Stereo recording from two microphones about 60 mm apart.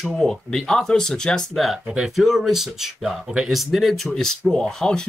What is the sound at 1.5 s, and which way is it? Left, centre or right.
Speech, centre.